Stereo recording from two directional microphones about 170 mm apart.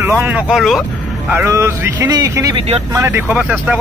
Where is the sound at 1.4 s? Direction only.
15° right (ahead or behind).